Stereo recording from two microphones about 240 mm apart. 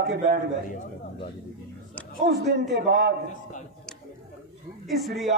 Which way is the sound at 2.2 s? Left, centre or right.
Right.